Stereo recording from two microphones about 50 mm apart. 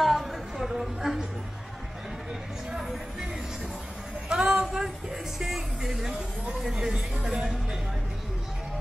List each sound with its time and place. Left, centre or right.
0.0 s chatter: centre
2.7 s a woman's voice: centre
4.3 s a sound: centre
5.4 s a woman's voice: centre